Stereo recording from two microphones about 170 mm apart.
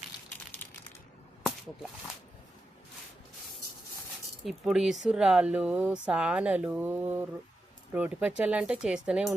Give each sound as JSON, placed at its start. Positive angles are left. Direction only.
{"t": 4.4, "sound": "speech", "side_deg": -5}